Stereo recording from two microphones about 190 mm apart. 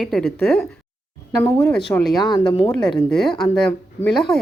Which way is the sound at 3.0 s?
Centre (ahead or behind).